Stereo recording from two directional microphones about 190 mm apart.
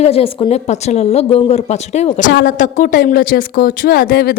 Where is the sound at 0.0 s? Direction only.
30° left (ahead or behind).